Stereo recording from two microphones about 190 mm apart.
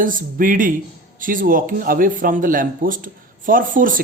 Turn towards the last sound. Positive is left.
turn(degrees=-45)  # may be behind; listen again after turning